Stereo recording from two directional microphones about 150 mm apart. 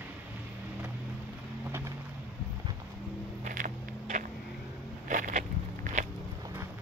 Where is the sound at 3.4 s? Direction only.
60° right (ahead or behind).